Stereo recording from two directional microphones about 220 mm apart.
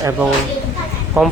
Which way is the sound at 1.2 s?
10° right (ahead or behind).